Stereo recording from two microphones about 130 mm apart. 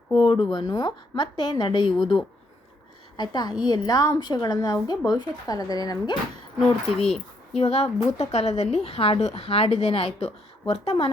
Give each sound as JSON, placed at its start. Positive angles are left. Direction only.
{"t": 0.1, "sound": "a woman's voice", "side_deg": 40}
{"t": 3.2, "sound": "a woman's voice", "side_deg": 35}
{"t": 7.5, "sound": "a woman's voice", "side_deg": 55}